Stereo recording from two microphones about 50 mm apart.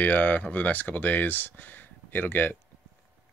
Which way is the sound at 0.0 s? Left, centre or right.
Left.